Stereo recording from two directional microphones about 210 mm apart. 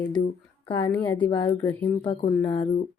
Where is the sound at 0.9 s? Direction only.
5° left (ahead or behind).